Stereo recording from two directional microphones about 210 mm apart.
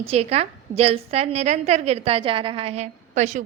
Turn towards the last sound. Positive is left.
turn(degrees=-35)  # may be behind; listen again after turning